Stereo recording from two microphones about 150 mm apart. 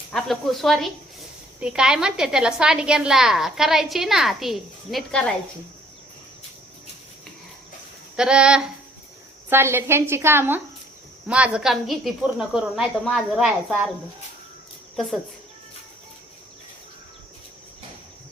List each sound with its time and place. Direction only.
0.1 s a woman's voice: centre (ahead or behind)
8.1 s a woman's voice: 5° right (ahead or behind)